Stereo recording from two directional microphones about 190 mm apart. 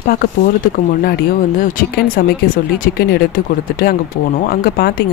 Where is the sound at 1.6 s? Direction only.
50° left (ahead or behind).